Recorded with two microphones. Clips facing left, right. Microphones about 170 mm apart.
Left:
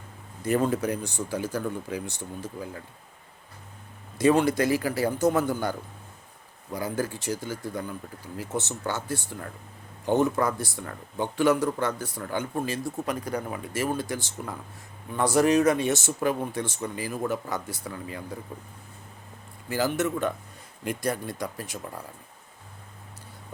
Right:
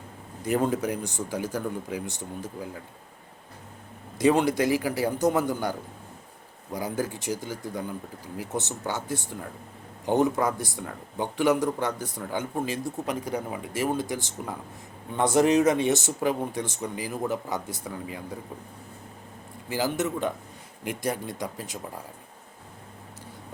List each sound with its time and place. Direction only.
0.4 s speech: 15° right (ahead or behind)
4.2 s speech: 15° right (ahead or behind)
20.0 s speech: 15° right (ahead or behind)